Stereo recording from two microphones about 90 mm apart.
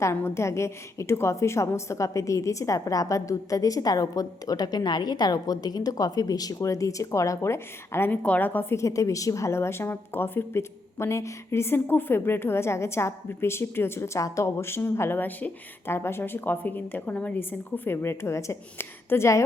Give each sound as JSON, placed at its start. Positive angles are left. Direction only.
{"t": 0.0, "sound": "a woman's voice", "side_deg": 30}
{"t": 8.8, "sound": "a woman's voice", "side_deg": 35}